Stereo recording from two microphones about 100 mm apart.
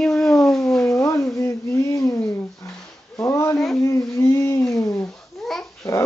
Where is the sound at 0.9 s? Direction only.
30° left (ahead or behind).